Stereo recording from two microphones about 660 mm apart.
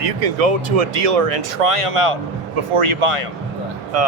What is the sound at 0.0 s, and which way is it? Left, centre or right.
Speech, right.